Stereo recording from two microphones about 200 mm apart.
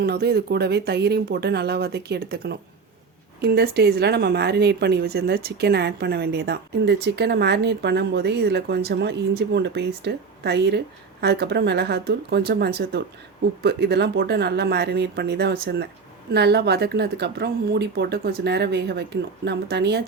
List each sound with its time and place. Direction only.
0.0 s speech: 55° right (ahead or behind)